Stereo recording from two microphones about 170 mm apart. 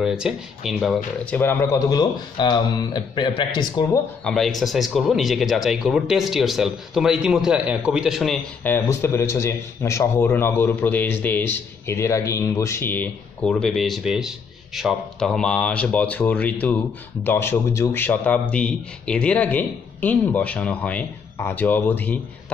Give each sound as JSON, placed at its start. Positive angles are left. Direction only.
{"t": 0.0, "sound": "speech", "side_deg": -5}
{"t": 4.2, "sound": "speech", "side_deg": 0}
{"t": 8.6, "sound": "speech", "side_deg": 15}